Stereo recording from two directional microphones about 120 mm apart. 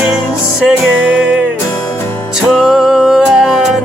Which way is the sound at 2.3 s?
5° right (ahead or behind).